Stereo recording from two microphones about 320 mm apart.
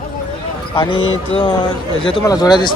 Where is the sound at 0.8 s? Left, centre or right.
Centre.